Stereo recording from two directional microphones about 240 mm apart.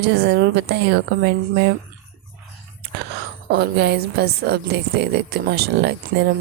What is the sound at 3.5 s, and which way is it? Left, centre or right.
A woman's voice, right.